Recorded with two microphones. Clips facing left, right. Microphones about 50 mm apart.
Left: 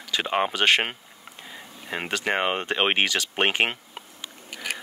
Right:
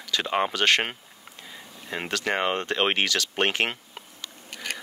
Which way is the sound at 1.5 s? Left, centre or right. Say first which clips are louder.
Left 1 dB; centre.